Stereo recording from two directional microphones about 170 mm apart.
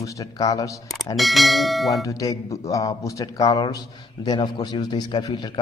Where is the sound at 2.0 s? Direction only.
20° left (ahead or behind).